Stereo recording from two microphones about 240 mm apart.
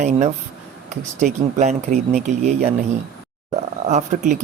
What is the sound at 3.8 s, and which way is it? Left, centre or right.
Speech, right.